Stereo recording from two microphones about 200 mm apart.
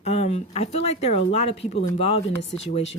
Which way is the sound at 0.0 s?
30° left (ahead or behind).